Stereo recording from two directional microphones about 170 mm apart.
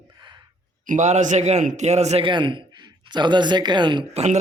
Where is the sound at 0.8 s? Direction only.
45° right (ahead or behind); by 4.0 s 25° right (ahead or behind).